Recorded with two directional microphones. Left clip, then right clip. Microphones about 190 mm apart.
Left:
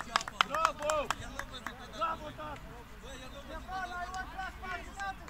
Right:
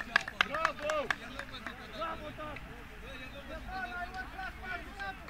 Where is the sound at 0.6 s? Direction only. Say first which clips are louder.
Left 2 dB; 20° right (ahead or behind).